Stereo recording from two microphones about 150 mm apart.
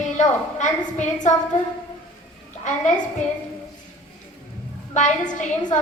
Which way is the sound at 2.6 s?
55° left (ahead or behind).